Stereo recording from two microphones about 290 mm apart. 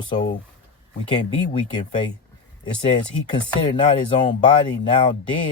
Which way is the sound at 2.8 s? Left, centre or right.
Centre.